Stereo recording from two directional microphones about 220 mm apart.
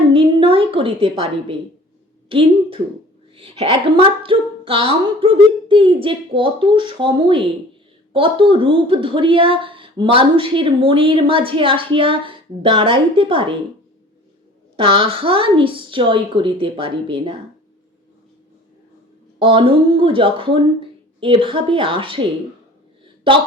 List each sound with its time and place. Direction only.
0.1 s a sound: 25° right (ahead or behind)
2.3 s a woman's voice: 25° right (ahead or behind)
14.8 s a woman's voice: 25° right (ahead or behind)
19.4 s a woman's voice: 25° right (ahead or behind)